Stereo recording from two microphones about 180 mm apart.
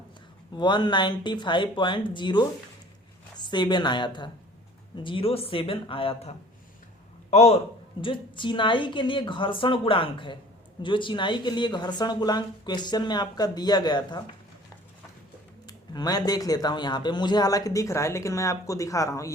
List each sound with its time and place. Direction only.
0.5 s a woman's voice: 25° left (ahead or behind)
15.6 s speech: 20° left (ahead or behind)